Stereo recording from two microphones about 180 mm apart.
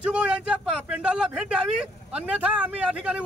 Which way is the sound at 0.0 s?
5° right (ahead or behind).